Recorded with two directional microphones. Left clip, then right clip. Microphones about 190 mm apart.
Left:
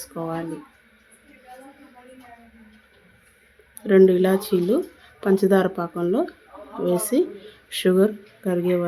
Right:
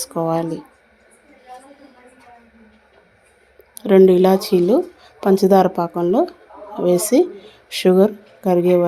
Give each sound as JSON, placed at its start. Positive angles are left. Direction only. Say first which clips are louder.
{"t": 0.0, "sound": "speech", "louder": "right 9 dB", "side_deg": -20}
{"t": 3.8, "sound": "a woman's voice", "louder": "right 4 dB", "side_deg": -15}